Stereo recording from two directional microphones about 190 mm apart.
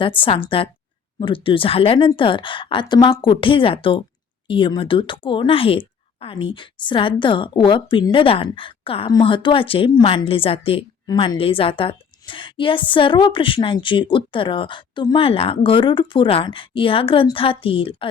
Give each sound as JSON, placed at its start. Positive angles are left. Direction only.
{"t": 0.0, "sound": "speech", "side_deg": 25}